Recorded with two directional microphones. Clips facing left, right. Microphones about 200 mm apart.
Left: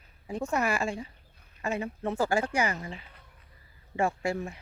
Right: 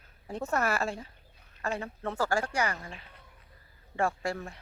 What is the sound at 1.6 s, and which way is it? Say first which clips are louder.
Speech: left 3 dB; 15° left (ahead or behind).